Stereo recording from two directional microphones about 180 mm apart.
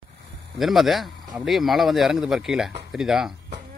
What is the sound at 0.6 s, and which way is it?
A man's voice, centre (ahead or behind).